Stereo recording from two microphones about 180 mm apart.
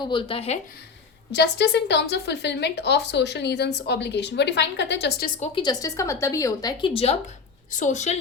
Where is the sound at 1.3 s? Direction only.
70° left (ahead or behind).